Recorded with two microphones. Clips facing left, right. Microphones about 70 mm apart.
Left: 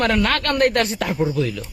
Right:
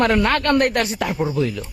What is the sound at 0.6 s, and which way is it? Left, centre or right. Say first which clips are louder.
Speech: left 1 dB; centre.